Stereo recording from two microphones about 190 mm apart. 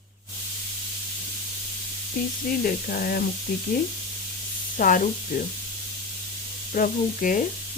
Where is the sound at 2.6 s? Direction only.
50° left (ahead or behind).